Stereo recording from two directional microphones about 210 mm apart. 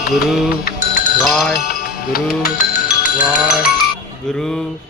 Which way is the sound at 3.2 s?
5° right (ahead or behind).